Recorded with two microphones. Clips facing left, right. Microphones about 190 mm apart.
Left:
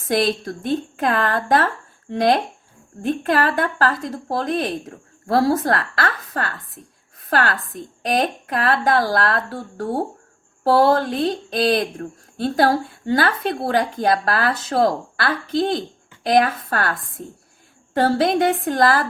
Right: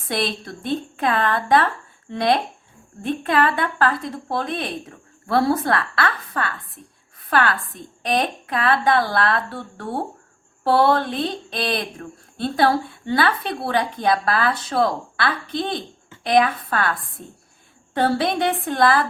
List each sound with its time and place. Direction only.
0.1 s speech: 45° left (ahead or behind)
8.0 s speech: 45° left (ahead or behind)
18.2 s speech: 45° left (ahead or behind)